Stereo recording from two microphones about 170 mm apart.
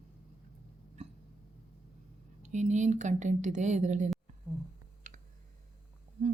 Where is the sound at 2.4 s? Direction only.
45° right (ahead or behind).